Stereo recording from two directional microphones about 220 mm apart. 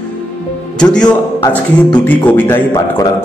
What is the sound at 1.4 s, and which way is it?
Speech, 20° left (ahead or behind).